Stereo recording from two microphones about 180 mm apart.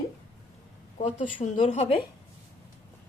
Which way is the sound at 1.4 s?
40° left (ahead or behind).